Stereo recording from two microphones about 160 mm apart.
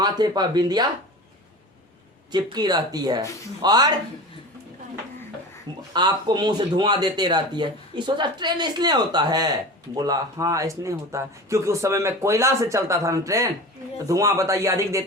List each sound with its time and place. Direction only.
0.0 s speech: 25° right (ahead or behind)
2.3 s speech: 25° right (ahead or behind)
5.9 s speech: 25° right (ahead or behind)